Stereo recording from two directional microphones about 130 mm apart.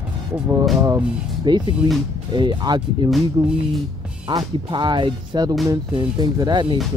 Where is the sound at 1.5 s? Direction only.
35° right (ahead or behind).